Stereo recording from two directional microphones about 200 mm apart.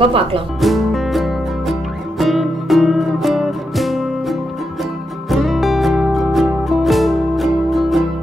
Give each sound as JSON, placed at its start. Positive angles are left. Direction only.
{"t": 0.0, "sound": "speech", "side_deg": -25}
{"t": 0.6, "sound": "music", "side_deg": 0}